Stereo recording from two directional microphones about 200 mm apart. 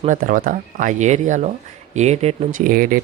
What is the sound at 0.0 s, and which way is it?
Speech, 40° right (ahead or behind).